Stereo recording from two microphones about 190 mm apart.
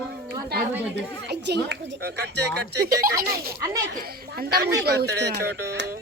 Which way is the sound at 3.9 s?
55° right (ahead or behind).